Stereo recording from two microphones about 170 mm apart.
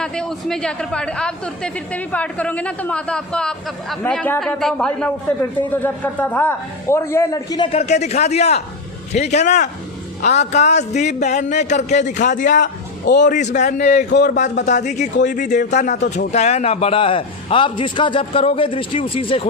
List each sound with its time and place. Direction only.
0.0 s speech: 5° left (ahead or behind); by 7.7 s 20° left (ahead or behind)
7.7 s a man's voice: 40° left (ahead or behind)
12.6 s a man's voice: 90° left
13.2 s a man's voice: 45° left (ahead or behind)
14.1 s speech: 90° left
14.3 s speech: 45° left (ahead or behind)